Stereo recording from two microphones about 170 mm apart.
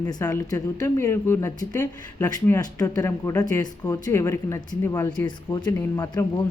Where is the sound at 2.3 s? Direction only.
20° left (ahead or behind).